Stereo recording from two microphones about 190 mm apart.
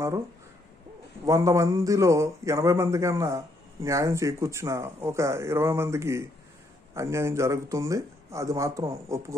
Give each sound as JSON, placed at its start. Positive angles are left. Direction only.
{"t": 1.2, "sound": "a man's voice", "side_deg": -15}